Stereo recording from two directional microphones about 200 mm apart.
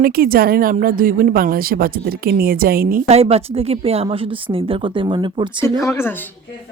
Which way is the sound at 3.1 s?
30° right (ahead or behind).